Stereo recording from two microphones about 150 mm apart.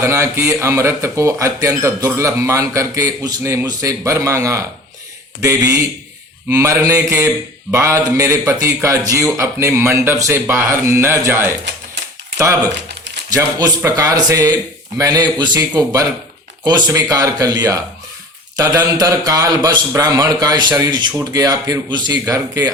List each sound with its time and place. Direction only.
0.0 s speech: 20° right (ahead or behind)